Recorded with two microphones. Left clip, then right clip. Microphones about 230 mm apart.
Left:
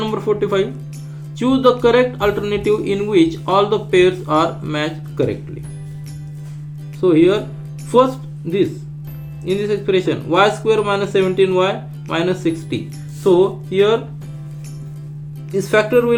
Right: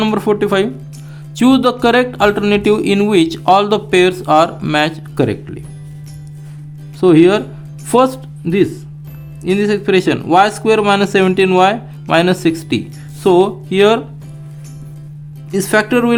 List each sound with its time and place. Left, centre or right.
0.0 s speech: right
7.0 s speech: right
15.5 s speech: right